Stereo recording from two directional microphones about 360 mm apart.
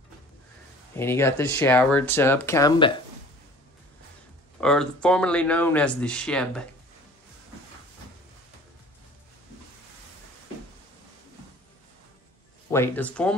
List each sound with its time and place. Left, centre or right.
0.9 s speech: centre
4.6 s speech: centre
12.7 s speech: centre